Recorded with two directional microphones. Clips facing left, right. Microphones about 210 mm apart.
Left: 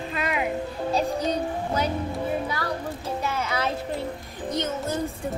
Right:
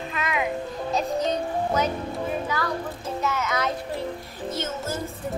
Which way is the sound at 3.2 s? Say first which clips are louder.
Right 3 dB; 30° left (ahead or behind).